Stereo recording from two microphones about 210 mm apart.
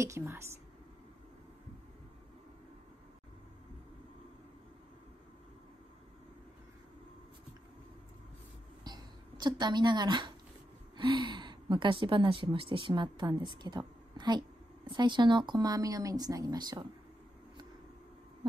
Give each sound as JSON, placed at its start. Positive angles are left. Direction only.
{"t": 0.0, "sound": "speech", "side_deg": -10}
{"t": 8.8, "sound": "a woman's voice", "side_deg": -20}